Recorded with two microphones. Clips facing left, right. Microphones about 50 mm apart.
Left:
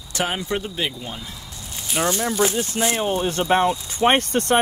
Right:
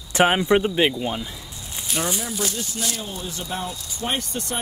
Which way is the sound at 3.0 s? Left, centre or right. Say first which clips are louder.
Left 10 dB; left.